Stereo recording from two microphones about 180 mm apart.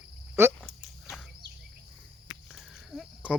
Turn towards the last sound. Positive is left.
turn(degrees=-5)  # may be behind; listen again after turning